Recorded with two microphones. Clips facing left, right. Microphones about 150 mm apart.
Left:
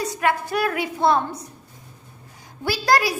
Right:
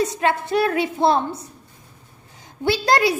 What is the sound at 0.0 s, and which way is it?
A child's voice, 25° right (ahead or behind).